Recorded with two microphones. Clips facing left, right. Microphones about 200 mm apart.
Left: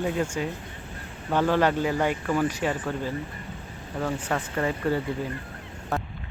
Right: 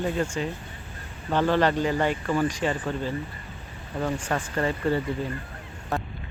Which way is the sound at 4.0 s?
5° right (ahead or behind).